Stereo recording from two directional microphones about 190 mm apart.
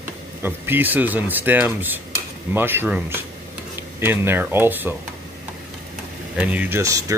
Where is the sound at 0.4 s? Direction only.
10° right (ahead or behind).